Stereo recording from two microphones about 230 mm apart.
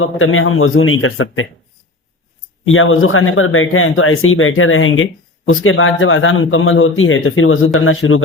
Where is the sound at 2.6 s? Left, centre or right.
Left.